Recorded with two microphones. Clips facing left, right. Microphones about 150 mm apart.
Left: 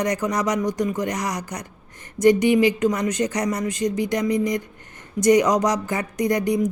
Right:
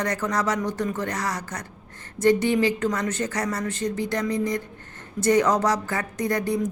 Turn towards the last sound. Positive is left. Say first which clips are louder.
# left 4 dB
turn(degrees=15)  # may be behind; listen again after turning